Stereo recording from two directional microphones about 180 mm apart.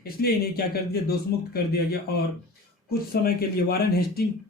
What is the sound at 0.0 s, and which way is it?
Speech, 60° left (ahead or behind).